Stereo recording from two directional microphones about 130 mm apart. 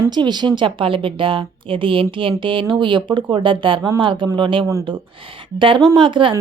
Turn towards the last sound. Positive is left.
turn(degrees=-40)  # may be behind; listen again after turning